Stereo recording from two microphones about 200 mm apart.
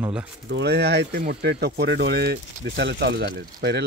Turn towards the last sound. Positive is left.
turn(degrees=-55)  # may be behind; listen again after turning